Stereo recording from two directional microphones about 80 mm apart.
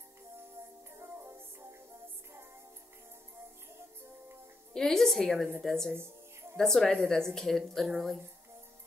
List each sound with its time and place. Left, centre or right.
0.9 s music: right
4.7 s a woman's voice: centre